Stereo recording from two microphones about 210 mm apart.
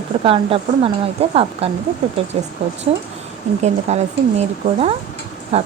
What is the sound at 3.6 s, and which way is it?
Speech, 30° right (ahead or behind).